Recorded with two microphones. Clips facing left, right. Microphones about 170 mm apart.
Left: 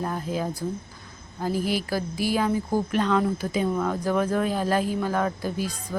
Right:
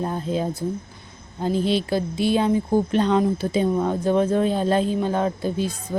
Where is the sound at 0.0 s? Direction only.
25° right (ahead or behind).